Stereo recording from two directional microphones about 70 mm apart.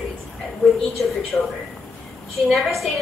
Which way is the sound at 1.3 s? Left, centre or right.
Left.